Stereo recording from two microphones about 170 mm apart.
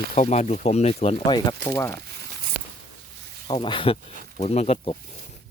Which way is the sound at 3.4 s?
30° left (ahead or behind).